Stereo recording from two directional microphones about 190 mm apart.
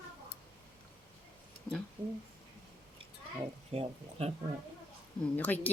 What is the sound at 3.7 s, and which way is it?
Speech, 35° right (ahead or behind).